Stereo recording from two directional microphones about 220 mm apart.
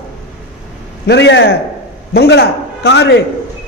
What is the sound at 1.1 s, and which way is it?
A man's voice, 50° left (ahead or behind).